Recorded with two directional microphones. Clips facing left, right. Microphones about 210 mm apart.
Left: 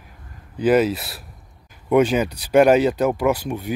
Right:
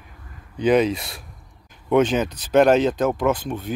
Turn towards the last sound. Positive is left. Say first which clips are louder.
# left 1 dB
turn(degrees=10)  # may be behind; listen again after turning